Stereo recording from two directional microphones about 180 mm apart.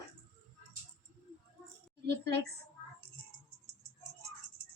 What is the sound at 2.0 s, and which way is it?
Speech, 65° right (ahead or behind).